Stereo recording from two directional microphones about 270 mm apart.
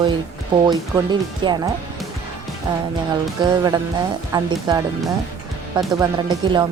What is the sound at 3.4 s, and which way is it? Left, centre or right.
Speech, centre.